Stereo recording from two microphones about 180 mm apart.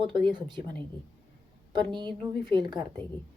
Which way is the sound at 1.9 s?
25° right (ahead or behind).